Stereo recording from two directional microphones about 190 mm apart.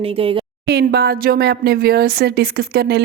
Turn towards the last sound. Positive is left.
turn(degrees=-55)  # may be behind; listen again after turning